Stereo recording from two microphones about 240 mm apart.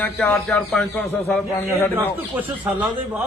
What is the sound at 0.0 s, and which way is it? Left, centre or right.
A man's voice, centre.